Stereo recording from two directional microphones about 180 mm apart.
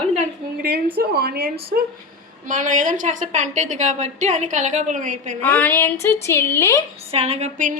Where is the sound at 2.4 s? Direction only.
45° right (ahead or behind).